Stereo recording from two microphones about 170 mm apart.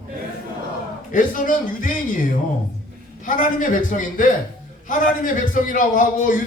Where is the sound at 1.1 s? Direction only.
50° left (ahead or behind).